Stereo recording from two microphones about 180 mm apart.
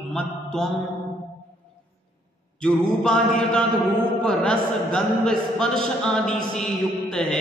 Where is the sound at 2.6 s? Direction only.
5° left (ahead or behind).